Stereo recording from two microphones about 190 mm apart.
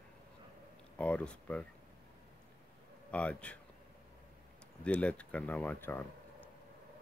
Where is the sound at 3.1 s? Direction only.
5° left (ahead or behind).